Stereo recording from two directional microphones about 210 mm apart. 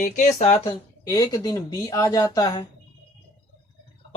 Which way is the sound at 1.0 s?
15° left (ahead or behind).